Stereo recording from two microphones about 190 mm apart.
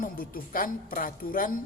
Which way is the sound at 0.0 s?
50° left (ahead or behind).